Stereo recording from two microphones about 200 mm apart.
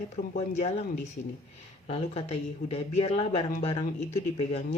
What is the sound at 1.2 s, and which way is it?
Speech, 50° left (ahead or behind).